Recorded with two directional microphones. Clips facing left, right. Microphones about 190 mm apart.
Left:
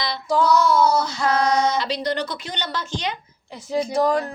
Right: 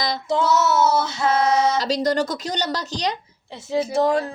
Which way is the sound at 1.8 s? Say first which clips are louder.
Right 4 dB; 45° right (ahead or behind).